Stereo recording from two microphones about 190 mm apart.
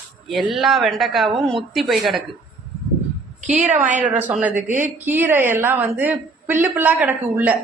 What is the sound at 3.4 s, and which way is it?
Speech, 40° right (ahead or behind).